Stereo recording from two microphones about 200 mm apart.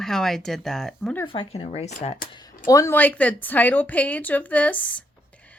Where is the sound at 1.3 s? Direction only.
25° left (ahead or behind).